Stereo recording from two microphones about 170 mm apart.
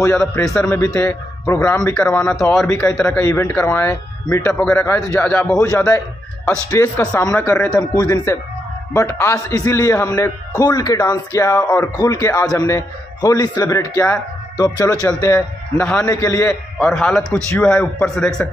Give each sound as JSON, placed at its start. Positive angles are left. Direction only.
{"t": 0.2, "sound": "speech", "side_deg": 5}
{"t": 2.3, "sound": "a man's voice", "side_deg": 0}
{"t": 3.1, "sound": "speech", "side_deg": 15}
{"t": 6.7, "sound": "a man's voice", "side_deg": 20}
{"t": 16.7, "sound": "a man's voice", "side_deg": 0}